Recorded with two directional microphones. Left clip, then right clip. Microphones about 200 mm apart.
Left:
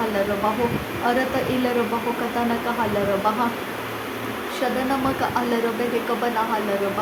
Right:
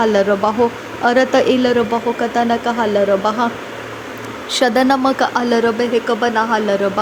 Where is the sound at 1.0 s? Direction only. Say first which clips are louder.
Right 10 dB; 35° right (ahead or behind).